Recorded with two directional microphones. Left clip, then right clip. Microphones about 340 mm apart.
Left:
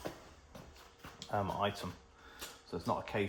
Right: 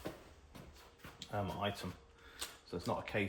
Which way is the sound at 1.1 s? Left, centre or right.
Centre.